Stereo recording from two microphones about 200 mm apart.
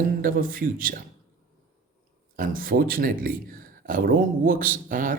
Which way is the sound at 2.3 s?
45° right (ahead or behind).